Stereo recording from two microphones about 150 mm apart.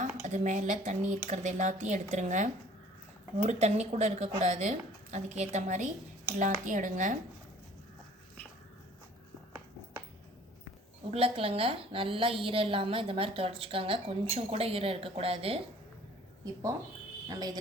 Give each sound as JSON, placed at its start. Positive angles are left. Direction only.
{"t": 0.0, "sound": "speech", "side_deg": -50}
{"t": 11.1, "sound": "a woman's voice", "side_deg": -40}
{"t": 17.2, "sound": "speech", "side_deg": -25}